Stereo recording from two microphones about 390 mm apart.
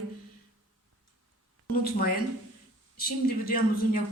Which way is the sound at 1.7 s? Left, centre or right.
Left.